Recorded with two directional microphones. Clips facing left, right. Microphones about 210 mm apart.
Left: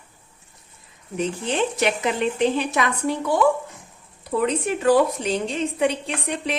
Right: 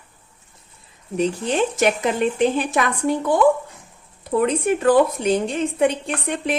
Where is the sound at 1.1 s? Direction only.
40° right (ahead or behind).